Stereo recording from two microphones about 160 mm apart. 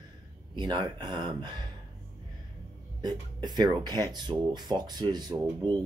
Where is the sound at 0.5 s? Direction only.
30° right (ahead or behind).